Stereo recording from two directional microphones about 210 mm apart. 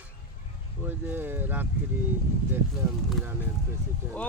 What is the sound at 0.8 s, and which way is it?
Speech, 10° right (ahead or behind).